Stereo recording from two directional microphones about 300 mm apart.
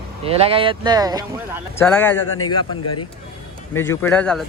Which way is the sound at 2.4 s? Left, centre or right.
Left.